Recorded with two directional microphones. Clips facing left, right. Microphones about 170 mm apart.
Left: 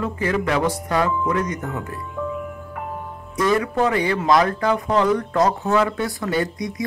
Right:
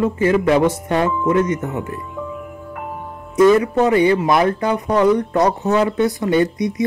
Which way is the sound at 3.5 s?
20° right (ahead or behind).